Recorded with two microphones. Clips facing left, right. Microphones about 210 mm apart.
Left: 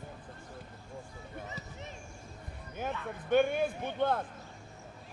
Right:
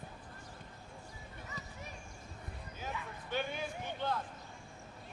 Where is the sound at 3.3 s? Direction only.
55° left (ahead or behind).